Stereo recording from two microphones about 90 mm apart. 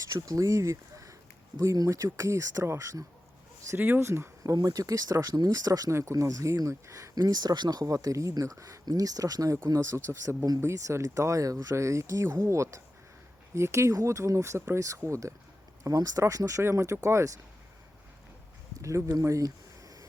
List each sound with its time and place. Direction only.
0.0 s speech: 40° right (ahead or behind)
3.8 s speech: 20° right (ahead or behind)
4.5 s speech: 45° right (ahead or behind)
18.8 s speech: 35° right (ahead or behind)